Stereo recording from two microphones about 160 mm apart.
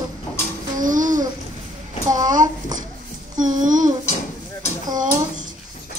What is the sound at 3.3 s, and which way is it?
Child singing, 55° right (ahead or behind).